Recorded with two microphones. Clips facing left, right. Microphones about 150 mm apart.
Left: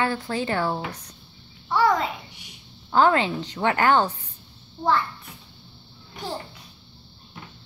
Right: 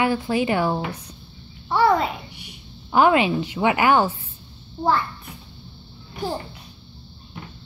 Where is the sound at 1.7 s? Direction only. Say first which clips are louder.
Right 3 dB; 35° right (ahead or behind).